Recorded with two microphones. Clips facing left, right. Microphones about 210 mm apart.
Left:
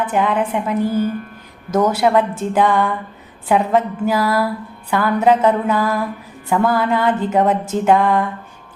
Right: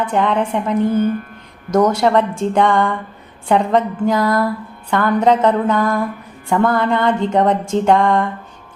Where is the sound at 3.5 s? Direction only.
5° left (ahead or behind).